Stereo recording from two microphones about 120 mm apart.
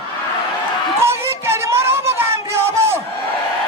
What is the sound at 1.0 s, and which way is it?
Music, 20° right (ahead or behind).